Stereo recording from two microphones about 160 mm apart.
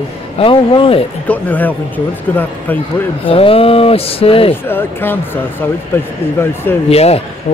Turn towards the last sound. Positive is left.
turn(degrees=40)  # may be behind; listen again after turning